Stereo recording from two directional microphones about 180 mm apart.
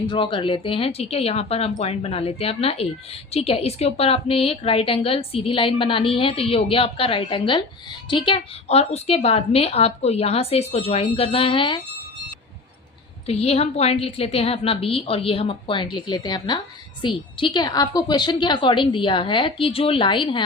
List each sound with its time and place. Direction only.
0.1 s a woman's voice: 30° left (ahead or behind)
13.2 s a woman's voice: 35° left (ahead or behind)